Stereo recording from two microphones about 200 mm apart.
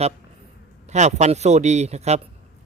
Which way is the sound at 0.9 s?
35° right (ahead or behind).